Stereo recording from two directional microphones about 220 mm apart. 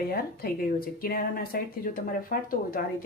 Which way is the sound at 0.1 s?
45° left (ahead or behind).